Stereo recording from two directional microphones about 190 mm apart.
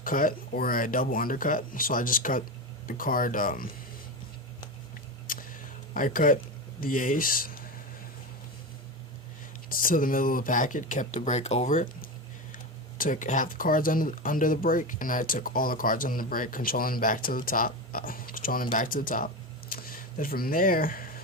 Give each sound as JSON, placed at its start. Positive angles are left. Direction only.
{"t": 0.0, "sound": "speech", "side_deg": 45}
{"t": 5.3, "sound": "a sound", "side_deg": 45}
{"t": 9.6, "sound": "speech", "side_deg": 50}
{"t": 13.0, "sound": "speech", "side_deg": 45}